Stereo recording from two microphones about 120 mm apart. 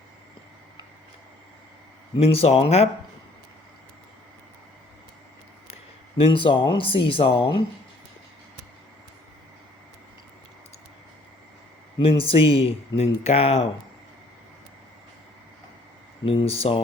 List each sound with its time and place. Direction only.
2.1 s speech: 55° left (ahead or behind)
6.1 s speech: 50° left (ahead or behind)
11.9 s speech: 50° left (ahead or behind)
16.2 s speech: 50° left (ahead or behind)